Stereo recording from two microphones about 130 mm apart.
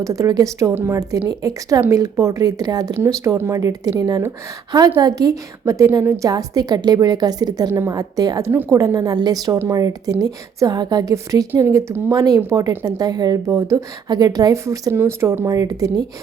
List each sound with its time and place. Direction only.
0.0 s a woman's voice: 25° right (ahead or behind)